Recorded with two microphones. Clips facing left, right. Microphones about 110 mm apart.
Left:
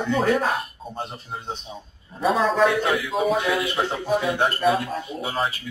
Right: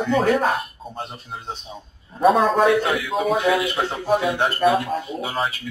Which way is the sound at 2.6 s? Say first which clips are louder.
Right 3 dB; centre (ahead or behind).